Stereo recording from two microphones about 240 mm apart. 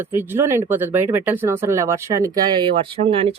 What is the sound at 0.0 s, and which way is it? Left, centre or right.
Speech, centre.